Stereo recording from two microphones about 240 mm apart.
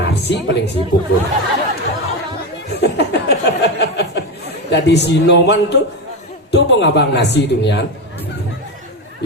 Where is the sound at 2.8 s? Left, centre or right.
Left.